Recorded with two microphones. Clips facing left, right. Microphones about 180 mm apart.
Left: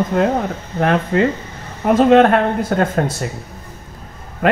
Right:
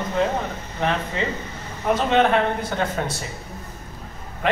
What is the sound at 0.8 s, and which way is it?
Speech, 55° left (ahead or behind).